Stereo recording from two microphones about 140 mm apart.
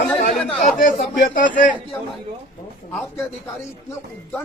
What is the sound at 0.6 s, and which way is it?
Speech, 80° left.